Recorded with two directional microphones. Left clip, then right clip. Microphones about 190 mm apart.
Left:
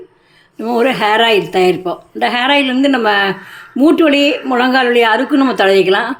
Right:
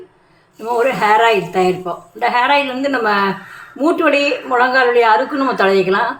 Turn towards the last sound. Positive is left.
turn(degrees=50)  # may be behind; listen again after turning